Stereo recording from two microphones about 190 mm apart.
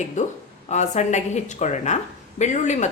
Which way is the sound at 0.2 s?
40° left (ahead or behind).